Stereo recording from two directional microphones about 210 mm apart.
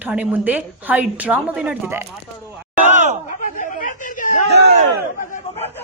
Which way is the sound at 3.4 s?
40° left (ahead or behind).